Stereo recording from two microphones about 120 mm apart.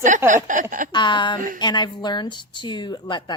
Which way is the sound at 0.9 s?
40° left (ahead or behind).